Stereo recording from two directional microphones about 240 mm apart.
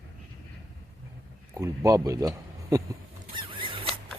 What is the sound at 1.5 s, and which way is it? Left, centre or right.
Speech, centre.